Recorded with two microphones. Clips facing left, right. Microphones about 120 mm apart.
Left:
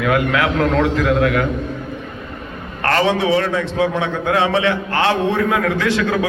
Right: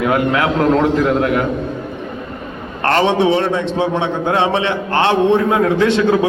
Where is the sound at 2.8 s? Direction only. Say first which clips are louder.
Right 3 dB; 25° right (ahead or behind).